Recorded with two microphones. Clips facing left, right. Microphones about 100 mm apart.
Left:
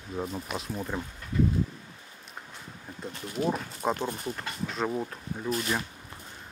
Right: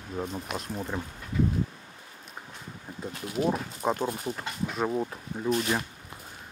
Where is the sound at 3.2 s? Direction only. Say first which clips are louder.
Right 2 dB; 5° right (ahead or behind).